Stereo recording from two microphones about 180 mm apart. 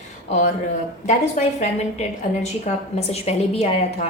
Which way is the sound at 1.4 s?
45° left (ahead or behind).